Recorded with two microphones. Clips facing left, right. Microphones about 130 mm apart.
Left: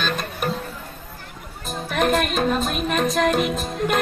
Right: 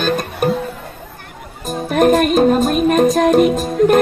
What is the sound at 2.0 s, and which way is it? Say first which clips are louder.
Music: right 9 dB; 45° right (ahead or behind).